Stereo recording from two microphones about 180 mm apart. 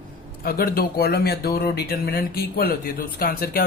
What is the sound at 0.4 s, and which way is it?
Speech, 55° left (ahead or behind).